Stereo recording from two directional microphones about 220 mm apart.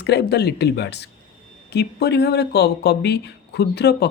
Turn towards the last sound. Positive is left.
turn(degrees=45)  # may be behind; listen again after turning